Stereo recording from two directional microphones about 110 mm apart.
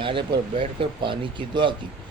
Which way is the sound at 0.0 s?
50° right (ahead or behind).